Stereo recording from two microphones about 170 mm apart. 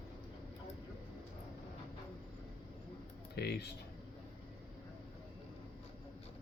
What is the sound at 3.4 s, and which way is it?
Speech, 75° left (ahead or behind).